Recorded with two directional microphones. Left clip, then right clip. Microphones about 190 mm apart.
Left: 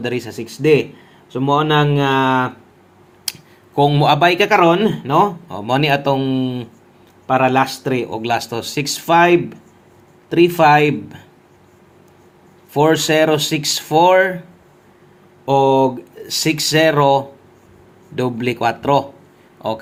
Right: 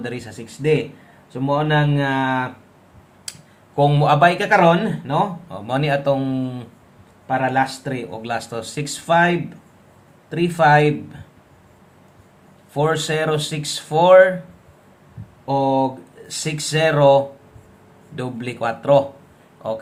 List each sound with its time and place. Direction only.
0.0 s speech: 25° left (ahead or behind)
3.3 s a sound: 30° left (ahead or behind)
3.8 s speech: 25° left (ahead or behind)
7.3 s speech: 35° left (ahead or behind)
12.7 s speech: 25° left (ahead or behind)
15.8 s speech: 30° left (ahead or behind)